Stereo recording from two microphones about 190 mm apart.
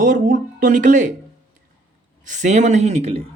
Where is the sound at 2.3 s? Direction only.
40° right (ahead or behind).